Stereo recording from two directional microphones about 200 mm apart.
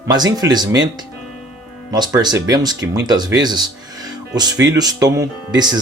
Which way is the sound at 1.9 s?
20° right (ahead or behind).